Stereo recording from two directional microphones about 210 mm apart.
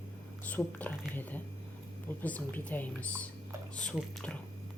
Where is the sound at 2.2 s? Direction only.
10° left (ahead or behind).